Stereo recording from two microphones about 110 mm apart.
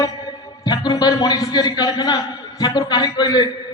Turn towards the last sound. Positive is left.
turn(degrees=40)  # may be behind; listen again after turning